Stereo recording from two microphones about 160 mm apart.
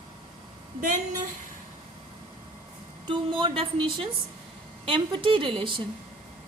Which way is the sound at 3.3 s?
30° right (ahead or behind).